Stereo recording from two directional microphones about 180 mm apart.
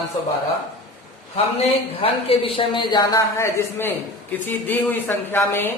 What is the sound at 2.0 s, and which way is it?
A man's voice, 30° left (ahead or behind).